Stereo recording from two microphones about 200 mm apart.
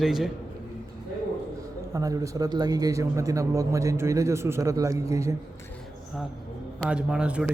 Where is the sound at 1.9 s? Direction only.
15° right (ahead or behind).